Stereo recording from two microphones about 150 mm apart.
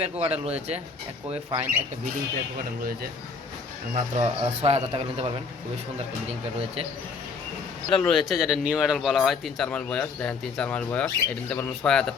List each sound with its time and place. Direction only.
0.0 s speech: 40° right (ahead or behind)
3.9 s speech: 50° right (ahead or behind)
7.9 s speech: centre (ahead or behind)